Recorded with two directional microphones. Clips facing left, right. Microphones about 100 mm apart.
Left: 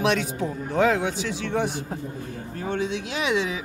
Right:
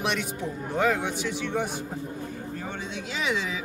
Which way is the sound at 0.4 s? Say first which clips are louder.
Left 4 dB; 90° left.